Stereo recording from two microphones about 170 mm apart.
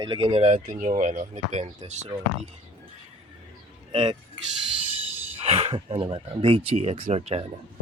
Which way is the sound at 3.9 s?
30° right (ahead or behind).